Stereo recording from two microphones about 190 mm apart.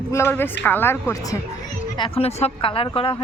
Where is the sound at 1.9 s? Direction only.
25° left (ahead or behind).